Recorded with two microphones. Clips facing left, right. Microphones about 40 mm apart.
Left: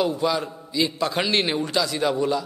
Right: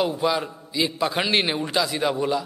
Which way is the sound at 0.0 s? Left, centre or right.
Centre.